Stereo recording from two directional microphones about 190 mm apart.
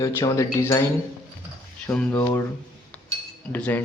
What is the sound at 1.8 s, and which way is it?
Cutlery, 15° left (ahead or behind).